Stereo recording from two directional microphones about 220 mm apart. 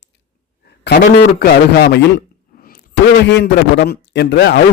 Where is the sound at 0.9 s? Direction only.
50° left (ahead or behind).